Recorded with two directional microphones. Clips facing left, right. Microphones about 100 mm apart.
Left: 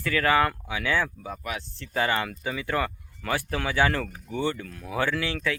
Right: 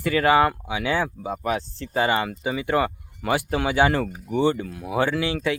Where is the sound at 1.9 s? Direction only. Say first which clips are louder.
Right 4 dB; 10° right (ahead or behind).